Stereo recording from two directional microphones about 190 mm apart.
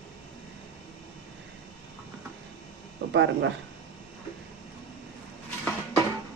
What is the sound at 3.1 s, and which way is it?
Speech, 70° right (ahead or behind).